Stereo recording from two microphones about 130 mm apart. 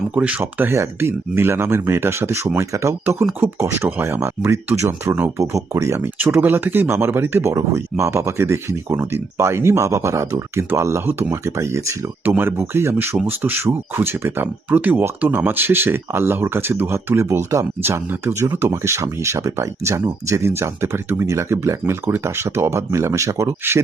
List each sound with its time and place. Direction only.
0.1 s speech: 10° right (ahead or behind)